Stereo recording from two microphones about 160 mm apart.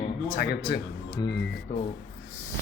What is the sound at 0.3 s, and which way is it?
Speech, 90° left.